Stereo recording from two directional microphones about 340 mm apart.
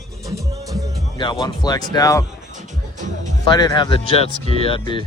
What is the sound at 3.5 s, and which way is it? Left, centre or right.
Speech, centre.